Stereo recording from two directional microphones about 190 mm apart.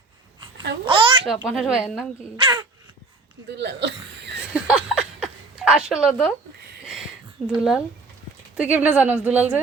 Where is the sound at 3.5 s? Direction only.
65° right (ahead or behind).